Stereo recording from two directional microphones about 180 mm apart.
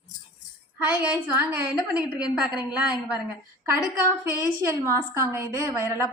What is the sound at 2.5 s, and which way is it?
Speech, 25° left (ahead or behind).